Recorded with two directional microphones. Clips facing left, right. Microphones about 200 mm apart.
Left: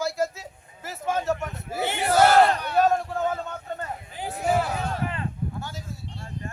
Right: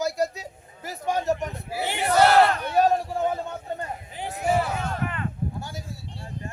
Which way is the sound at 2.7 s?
15° right (ahead or behind).